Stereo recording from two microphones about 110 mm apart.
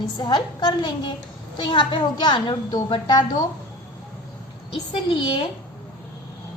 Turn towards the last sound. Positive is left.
turn(degrees=50)  # may be behind; listen again after turning